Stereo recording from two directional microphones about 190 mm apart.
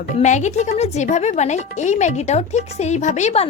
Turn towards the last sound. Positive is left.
turn(degrees=35)  # may be behind; listen again after turning